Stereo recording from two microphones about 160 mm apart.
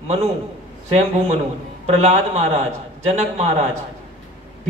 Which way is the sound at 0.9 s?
45° right (ahead or behind).